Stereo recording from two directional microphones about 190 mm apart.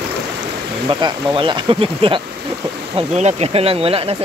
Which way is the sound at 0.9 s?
25° right (ahead or behind).